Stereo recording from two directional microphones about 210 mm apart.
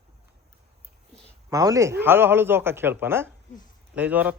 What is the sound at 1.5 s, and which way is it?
Speech, 15° right (ahead or behind).